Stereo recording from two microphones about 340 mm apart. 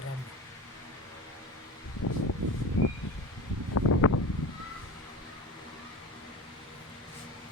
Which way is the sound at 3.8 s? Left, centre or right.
Left.